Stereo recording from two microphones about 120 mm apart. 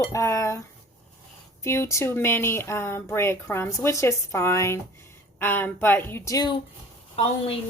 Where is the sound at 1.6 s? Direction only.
25° left (ahead or behind).